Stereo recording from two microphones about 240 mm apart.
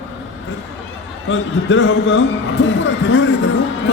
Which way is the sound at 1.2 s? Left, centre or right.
Left.